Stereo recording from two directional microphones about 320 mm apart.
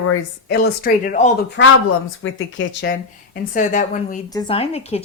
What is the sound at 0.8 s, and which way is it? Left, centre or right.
Speech, left.